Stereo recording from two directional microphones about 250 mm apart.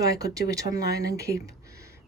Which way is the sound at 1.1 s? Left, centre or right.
Centre.